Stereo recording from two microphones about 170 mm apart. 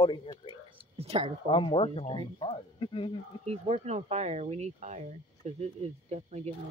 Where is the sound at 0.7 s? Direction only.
35° right (ahead or behind).